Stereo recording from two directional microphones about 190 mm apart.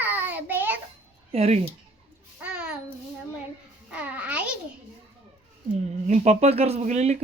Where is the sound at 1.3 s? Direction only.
30° right (ahead or behind).